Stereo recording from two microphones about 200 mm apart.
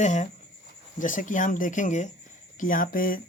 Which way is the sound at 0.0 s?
40° left (ahead or behind).